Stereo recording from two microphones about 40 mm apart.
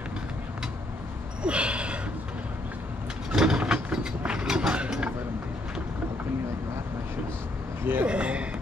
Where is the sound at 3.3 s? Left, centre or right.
Right.